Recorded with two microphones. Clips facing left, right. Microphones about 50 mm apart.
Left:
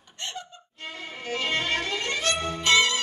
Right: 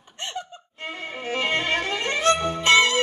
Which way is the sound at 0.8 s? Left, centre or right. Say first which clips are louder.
Right 4 dB; right.